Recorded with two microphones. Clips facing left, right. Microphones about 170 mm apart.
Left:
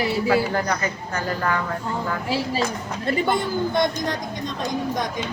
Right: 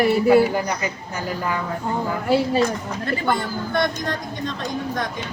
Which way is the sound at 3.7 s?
20° left (ahead or behind).